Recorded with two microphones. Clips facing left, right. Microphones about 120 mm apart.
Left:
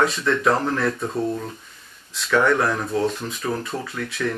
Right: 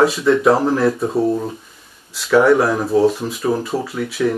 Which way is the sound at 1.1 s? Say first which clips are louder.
Right 7 dB; 30° right (ahead or behind).